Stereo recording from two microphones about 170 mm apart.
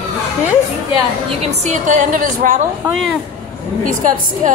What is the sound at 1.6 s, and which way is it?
A woman's voice, 50° right (ahead or behind).